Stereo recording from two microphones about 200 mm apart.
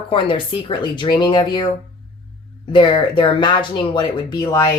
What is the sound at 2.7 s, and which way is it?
Speech, 25° left (ahead or behind).